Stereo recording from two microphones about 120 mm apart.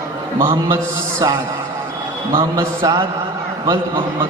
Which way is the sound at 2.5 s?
30° right (ahead or behind).